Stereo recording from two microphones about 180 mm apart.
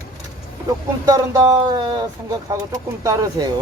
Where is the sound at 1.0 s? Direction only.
20° right (ahead or behind).